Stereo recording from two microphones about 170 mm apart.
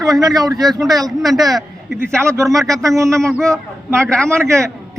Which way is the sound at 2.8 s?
20° right (ahead or behind).